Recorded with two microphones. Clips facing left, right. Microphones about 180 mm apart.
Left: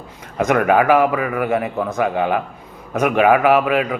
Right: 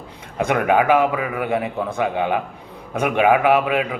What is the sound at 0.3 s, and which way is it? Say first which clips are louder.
Speech: left 2 dB; 20° right (ahead or behind).